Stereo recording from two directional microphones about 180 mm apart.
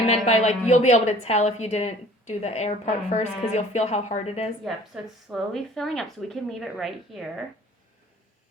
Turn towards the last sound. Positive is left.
turn(degrees=0)  # may be behind; listen again after turning